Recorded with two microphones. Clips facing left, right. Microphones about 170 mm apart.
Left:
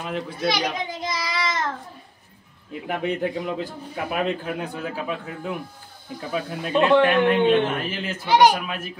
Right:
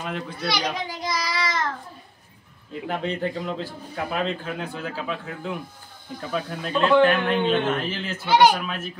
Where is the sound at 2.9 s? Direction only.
10° left (ahead or behind).